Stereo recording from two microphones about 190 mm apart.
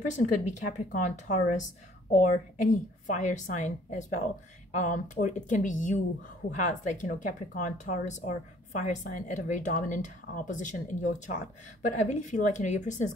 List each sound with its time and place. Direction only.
0.0 s speech: 40° left (ahead or behind)